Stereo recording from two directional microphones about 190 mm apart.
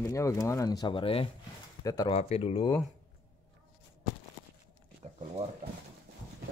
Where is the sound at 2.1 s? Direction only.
35° left (ahead or behind).